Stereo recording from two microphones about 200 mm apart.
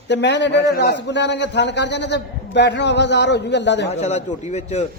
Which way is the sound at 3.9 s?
35° left (ahead or behind).